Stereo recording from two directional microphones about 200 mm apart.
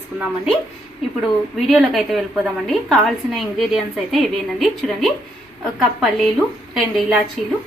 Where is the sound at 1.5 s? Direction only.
Centre (ahead or behind).